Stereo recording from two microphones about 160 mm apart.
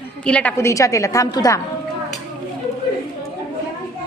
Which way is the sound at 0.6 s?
20° left (ahead or behind).